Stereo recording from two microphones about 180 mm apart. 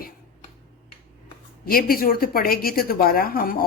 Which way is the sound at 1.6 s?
55° left (ahead or behind).